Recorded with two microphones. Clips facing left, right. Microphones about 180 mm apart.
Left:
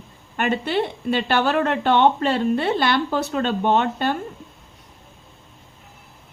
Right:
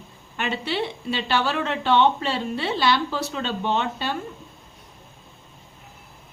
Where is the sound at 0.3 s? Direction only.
50° left (ahead or behind).